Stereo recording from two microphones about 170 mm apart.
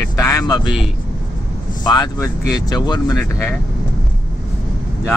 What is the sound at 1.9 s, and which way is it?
Speech, 25° left (ahead or behind).